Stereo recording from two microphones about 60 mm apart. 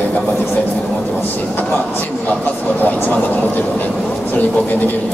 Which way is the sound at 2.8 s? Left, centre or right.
Left.